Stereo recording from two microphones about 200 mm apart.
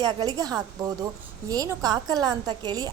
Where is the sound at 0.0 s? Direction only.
20° right (ahead or behind).